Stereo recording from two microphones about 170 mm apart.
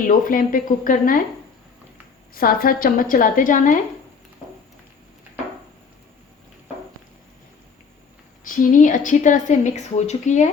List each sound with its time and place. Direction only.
0.1 s a woman's voice: 55° left (ahead or behind)
2.3 s a woman's voice: 60° left (ahead or behind)
8.4 s a woman's voice: 50° left (ahead or behind)